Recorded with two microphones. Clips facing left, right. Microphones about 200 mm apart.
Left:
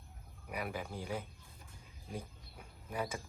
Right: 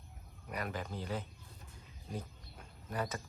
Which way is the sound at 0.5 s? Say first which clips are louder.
Even; 10° left (ahead or behind).